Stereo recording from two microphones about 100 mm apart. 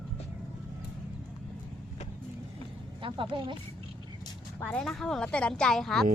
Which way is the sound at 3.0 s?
60° right (ahead or behind).